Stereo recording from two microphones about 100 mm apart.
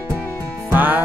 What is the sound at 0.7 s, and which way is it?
Music, 20° right (ahead or behind).